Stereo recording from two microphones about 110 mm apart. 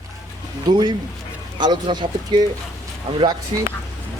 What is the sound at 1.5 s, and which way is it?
Speech, 40° right (ahead or behind).